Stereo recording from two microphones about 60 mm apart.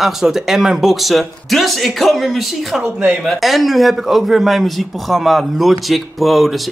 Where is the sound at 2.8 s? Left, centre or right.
Right.